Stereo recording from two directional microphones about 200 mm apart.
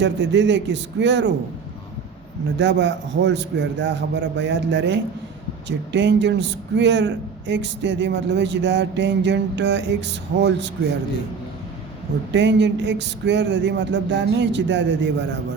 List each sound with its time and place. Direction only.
0.0 s a man's voice: 60° right (ahead or behind)
2.6 s a man's voice: 60° right (ahead or behind)
12.3 s a man's voice: 60° right (ahead or behind)